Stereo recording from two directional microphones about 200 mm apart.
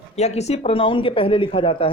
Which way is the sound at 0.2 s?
35° left (ahead or behind).